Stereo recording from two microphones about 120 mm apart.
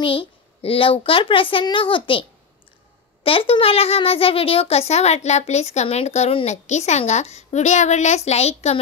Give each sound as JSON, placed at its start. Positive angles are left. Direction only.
{"t": 0.0, "sound": "a woman's voice", "side_deg": 50}
{"t": 3.3, "sound": "a child's voice", "side_deg": 50}